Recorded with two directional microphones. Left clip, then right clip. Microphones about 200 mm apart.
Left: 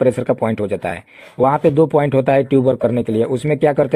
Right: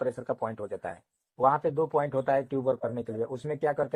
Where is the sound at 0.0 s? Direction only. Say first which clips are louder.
Left 15 dB; 45° left (ahead or behind).